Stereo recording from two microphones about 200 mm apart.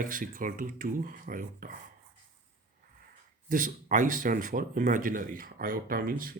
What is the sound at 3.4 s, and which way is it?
Speech, 45° right (ahead or behind).